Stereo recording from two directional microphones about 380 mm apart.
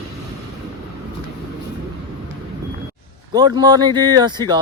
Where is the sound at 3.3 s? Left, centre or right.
Centre.